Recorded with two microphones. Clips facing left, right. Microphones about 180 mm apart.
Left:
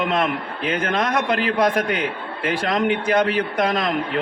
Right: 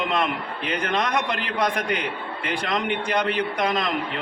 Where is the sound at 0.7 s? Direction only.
50° left (ahead or behind).